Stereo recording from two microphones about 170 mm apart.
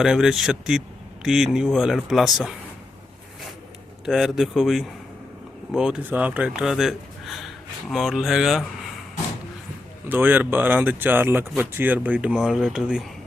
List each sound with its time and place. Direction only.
0.0 s speech: 5° right (ahead or behind)
4.0 s speech: centre (ahead or behind)
10.1 s speech: 10° right (ahead or behind)